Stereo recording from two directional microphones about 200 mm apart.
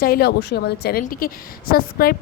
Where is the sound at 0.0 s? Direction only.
50° left (ahead or behind).